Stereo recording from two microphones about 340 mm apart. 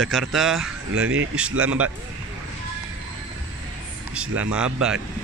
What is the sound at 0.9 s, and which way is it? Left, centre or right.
Speech, right.